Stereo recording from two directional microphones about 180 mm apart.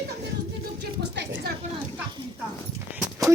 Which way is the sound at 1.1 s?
70° right (ahead or behind).